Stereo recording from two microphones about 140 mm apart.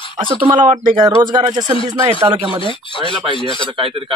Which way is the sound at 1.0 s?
30° right (ahead or behind).